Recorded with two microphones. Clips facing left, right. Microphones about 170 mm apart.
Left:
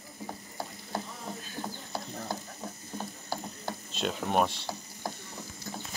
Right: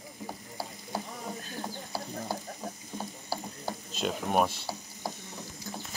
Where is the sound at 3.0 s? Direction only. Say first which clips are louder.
Even; 10° right (ahead or behind).